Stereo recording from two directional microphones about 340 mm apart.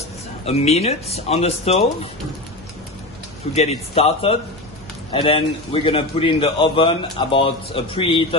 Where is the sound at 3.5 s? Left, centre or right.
Centre.